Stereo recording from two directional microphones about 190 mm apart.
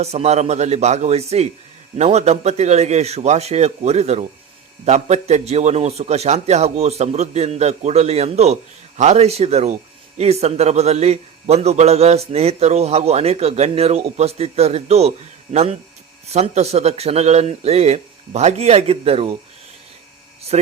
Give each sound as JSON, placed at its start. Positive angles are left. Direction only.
{"t": 0.0, "sound": "a man's voice", "side_deg": -35}
{"t": 16.3, "sound": "a man's voice", "side_deg": -35}
{"t": 20.5, "sound": "a man's voice", "side_deg": -35}